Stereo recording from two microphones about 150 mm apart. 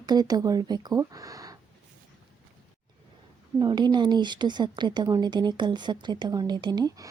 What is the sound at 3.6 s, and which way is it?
A woman's voice, 30° right (ahead or behind).